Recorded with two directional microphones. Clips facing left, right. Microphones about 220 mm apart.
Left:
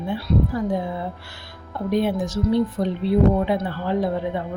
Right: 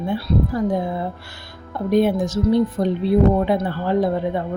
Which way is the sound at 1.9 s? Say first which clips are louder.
Right 5 dB; 45° right (ahead or behind).